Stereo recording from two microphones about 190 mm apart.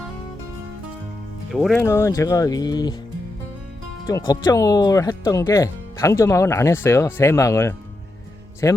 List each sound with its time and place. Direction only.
1.5 s speech: centre (ahead or behind)
1.8 s speech: 15° left (ahead or behind)
4.0 s speech: 20° left (ahead or behind)